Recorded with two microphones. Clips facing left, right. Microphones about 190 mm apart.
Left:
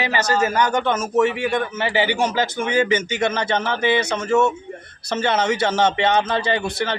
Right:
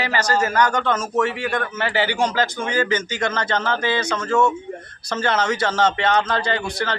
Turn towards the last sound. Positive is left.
turn(degrees=20)  # may be behind; listen again after turning